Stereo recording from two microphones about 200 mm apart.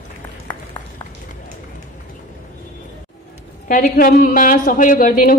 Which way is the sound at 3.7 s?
45° left (ahead or behind).